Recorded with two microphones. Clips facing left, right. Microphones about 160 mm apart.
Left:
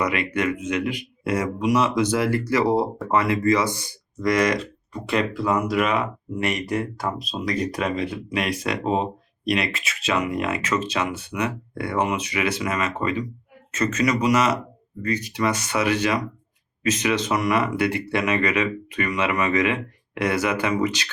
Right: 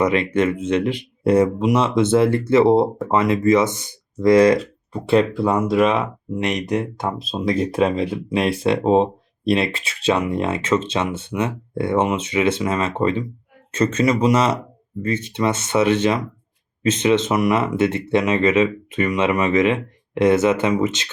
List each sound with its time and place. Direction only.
0.0 s speech: 25° right (ahead or behind)